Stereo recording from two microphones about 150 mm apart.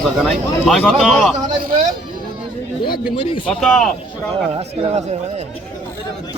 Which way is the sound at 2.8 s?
85° left.